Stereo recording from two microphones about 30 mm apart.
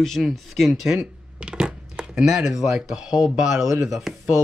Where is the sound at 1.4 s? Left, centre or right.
Right.